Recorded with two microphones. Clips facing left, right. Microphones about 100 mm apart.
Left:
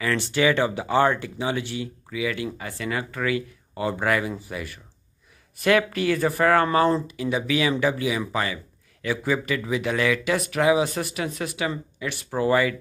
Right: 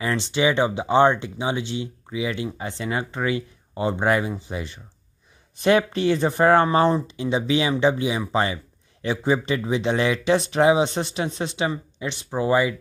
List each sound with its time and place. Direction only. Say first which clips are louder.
0.0 s speech: even; 20° right (ahead or behind)